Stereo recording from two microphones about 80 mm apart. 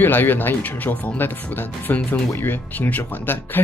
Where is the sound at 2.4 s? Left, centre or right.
Left.